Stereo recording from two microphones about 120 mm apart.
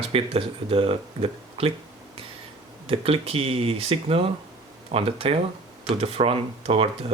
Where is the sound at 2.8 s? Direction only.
55° right (ahead or behind).